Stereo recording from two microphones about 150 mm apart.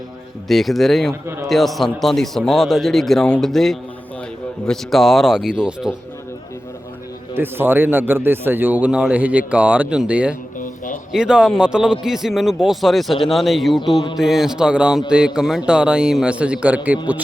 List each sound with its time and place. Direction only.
0.4 s a man's voice: centre (ahead or behind)
7.3 s a man's voice: 15° right (ahead or behind)